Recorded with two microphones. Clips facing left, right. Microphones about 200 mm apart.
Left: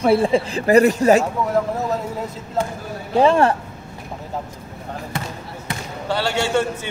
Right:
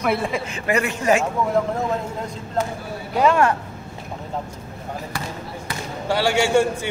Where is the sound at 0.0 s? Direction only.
30° left (ahead or behind).